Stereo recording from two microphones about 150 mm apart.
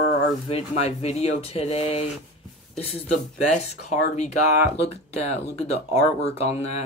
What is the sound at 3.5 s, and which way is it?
Speech, 50° left (ahead or behind).